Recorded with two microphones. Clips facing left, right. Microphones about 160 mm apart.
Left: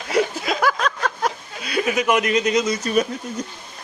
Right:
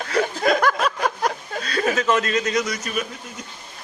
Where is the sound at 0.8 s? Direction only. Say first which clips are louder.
Right 1 dB; 10° right (ahead or behind).